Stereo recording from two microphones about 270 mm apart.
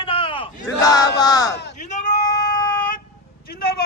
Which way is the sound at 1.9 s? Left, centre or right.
Left.